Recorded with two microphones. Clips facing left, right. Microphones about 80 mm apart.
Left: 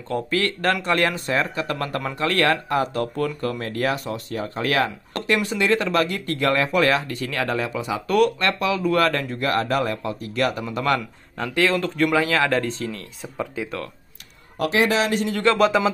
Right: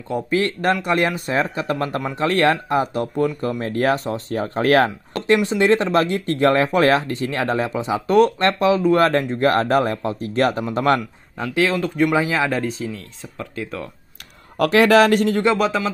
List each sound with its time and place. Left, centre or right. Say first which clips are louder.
0.1 s speech: right 3 dB; right
3.7 s speech: right 5 dB; right
5.2 s speech: right 5 dB; right
11.3 s speech: right 1 dB; centre
13.2 s speech: left 3 dB; centre
14.6 s speech: right 7 dB; right
15.5 s speech: left 1 dB; centre